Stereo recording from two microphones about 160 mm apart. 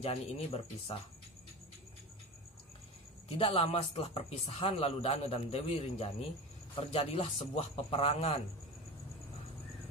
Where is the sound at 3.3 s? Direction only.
35° left (ahead or behind).